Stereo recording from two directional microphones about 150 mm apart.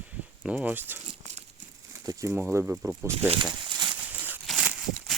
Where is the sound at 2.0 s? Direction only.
20° right (ahead or behind).